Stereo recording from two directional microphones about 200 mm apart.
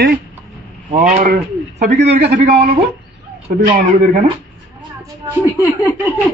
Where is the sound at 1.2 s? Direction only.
55° right (ahead or behind).